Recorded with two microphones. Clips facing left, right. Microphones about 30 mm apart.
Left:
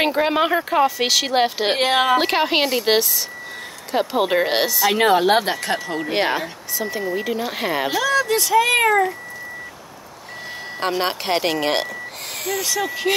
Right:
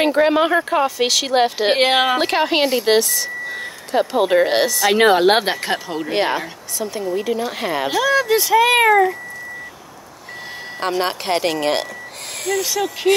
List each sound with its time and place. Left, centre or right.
0.0 s speech: centre
1.8 s speech: right
2.1 s speech: centre
4.9 s a woman's voice: right
5.9 s speech: centre
8.0 s speech: centre
10.8 s speech: centre